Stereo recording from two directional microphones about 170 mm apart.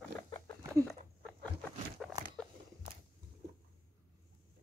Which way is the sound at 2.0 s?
5° right (ahead or behind).